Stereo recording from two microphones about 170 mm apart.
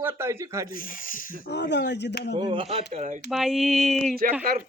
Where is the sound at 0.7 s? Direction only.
55° left (ahead or behind).